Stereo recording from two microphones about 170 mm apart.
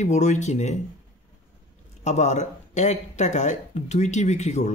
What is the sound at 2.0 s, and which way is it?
A man's voice, 40° left (ahead or behind).